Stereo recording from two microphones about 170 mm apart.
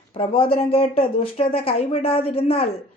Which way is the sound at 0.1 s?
30° left (ahead or behind).